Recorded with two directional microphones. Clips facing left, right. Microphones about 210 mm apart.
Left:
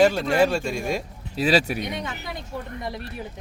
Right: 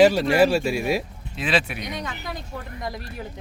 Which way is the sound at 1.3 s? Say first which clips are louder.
Left 4 dB; 40° left (ahead or behind).